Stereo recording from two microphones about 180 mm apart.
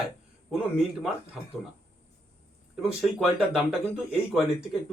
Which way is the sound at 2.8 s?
5° right (ahead or behind).